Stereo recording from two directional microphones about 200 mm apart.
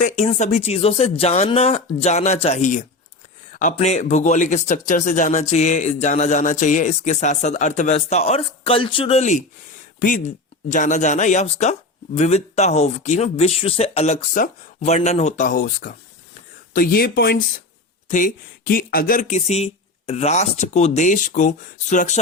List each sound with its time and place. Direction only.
0.0 s speech: 35° left (ahead or behind)